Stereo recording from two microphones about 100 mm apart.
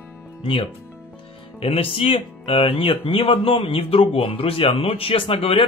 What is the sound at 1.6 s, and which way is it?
Speech, 75° left (ahead or behind).